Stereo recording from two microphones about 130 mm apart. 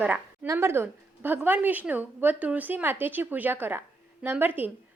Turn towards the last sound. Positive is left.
turn(degrees=-15)  # may be behind; listen again after turning